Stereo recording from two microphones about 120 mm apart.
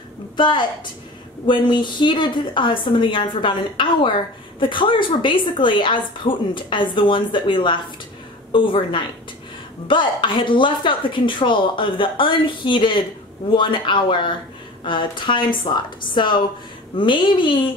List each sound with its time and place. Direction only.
0.4 s a woman's voice: 40° left (ahead or behind)